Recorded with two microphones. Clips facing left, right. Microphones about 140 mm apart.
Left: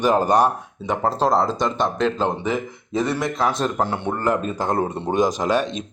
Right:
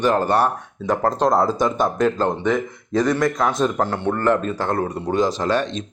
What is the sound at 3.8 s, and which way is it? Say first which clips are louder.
Speech: right 2 dB; 15° left (ahead or behind).